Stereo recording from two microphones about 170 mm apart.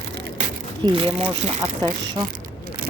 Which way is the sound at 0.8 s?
30° right (ahead or behind).